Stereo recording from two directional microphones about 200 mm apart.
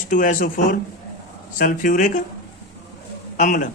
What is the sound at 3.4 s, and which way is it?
Speech, 40° left (ahead or behind).